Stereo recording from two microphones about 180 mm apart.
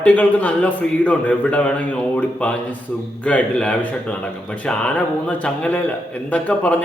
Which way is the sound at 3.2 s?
5° left (ahead or behind).